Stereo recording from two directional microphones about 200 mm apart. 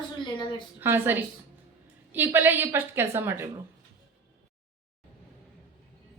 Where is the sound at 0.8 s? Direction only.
10° right (ahead or behind).